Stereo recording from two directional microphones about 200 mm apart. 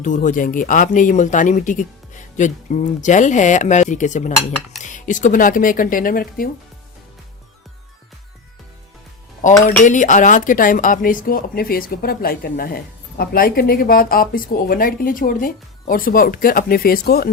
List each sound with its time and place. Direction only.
0.0 s speech: 40° left (ahead or behind)
9.6 s speech: 40° left (ahead or behind)